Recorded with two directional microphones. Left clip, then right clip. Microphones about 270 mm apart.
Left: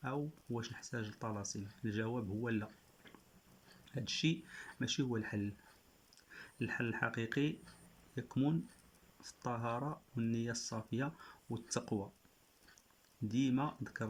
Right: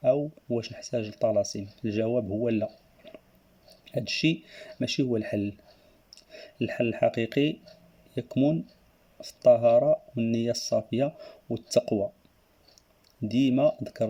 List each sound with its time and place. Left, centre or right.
0.0 s speech: centre
13.3 s speech: centre